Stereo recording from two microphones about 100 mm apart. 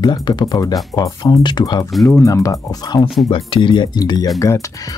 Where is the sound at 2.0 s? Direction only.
30° left (ahead or behind).